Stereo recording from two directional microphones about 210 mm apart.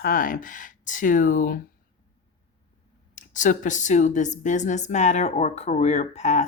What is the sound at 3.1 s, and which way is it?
Speech, 35° left (ahead or behind).